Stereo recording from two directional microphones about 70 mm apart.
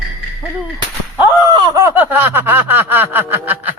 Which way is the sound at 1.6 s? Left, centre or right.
Right.